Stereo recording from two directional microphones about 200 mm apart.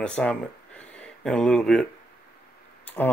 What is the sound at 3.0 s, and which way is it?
Speech, 10° left (ahead or behind).